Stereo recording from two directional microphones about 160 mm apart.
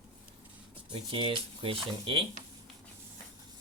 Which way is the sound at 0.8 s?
35° right (ahead or behind).